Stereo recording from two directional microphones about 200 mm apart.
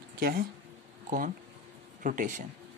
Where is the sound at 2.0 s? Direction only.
40° right (ahead or behind).